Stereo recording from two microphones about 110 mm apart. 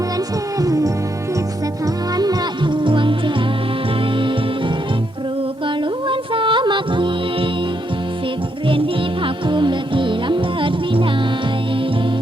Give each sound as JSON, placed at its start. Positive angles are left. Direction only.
{"t": 0.6, "sound": "music", "side_deg": -35}
{"t": 2.1, "sound": "music", "side_deg": -35}
{"t": 5.6, "sound": "music", "side_deg": -50}
{"t": 9.2, "sound": "music", "side_deg": -45}